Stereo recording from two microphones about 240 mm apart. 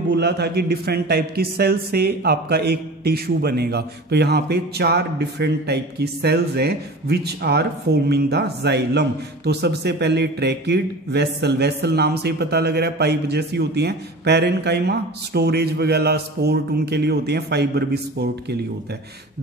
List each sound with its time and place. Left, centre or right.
0.1 s a man's voice: right